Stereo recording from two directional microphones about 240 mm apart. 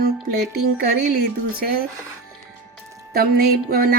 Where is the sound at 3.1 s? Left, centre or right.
Right.